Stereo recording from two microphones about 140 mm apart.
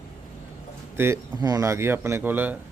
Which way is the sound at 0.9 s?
20° right (ahead or behind).